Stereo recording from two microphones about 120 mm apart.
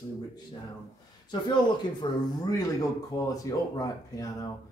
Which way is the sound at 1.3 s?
40° left (ahead or behind).